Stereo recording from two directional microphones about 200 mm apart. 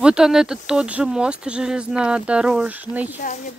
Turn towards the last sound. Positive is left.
turn(degrees=40)  # may be behind; listen again after turning